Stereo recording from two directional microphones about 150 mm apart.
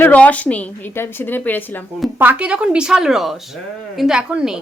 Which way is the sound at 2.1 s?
10° right (ahead or behind).